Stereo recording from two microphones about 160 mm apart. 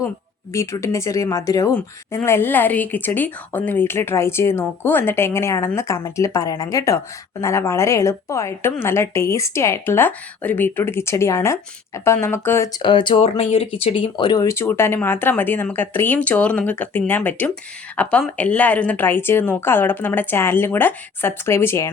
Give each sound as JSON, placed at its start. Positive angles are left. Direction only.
{"t": 0.5, "sound": "speech", "side_deg": 20}
{"t": 12.8, "sound": "speech", "side_deg": 30}
{"t": 14.4, "sound": "speech", "side_deg": 15}